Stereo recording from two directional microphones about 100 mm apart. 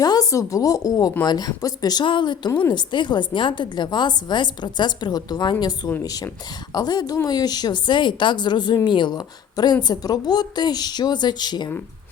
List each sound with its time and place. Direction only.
0.0 s a woman's voice: 40° left (ahead or behind)
2.0 s a woman's voice: 50° left (ahead or behind)